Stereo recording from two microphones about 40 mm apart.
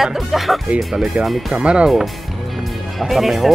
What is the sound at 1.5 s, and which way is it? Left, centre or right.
Speech, right.